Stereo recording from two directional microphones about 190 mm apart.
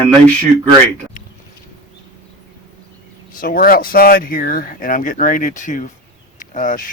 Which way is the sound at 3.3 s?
50° left (ahead or behind).